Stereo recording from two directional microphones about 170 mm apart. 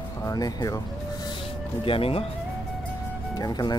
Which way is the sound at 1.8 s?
35° left (ahead or behind).